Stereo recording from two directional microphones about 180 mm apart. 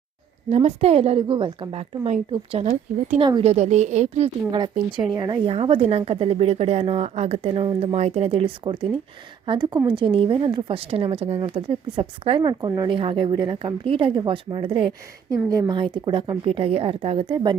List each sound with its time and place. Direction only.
0.5 s speech: 35° right (ahead or behind)
3.2 s a woman's voice: 25° right (ahead or behind)
3.4 s speech: 40° right (ahead or behind)
5.1 s a woman's voice: 25° right (ahead or behind)